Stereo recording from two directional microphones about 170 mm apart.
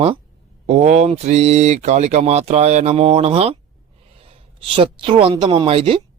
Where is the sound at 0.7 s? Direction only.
40° right (ahead or behind).